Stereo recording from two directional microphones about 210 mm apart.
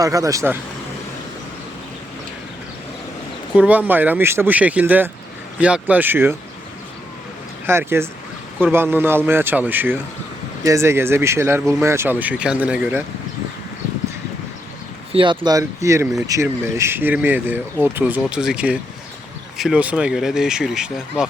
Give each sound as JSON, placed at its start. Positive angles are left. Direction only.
{"t": 0.0, "sound": "speech", "side_deg": -15}
{"t": 3.5, "sound": "speech", "side_deg": -5}
{"t": 7.7, "sound": "speech", "side_deg": -10}
{"t": 15.1, "sound": "speech", "side_deg": -25}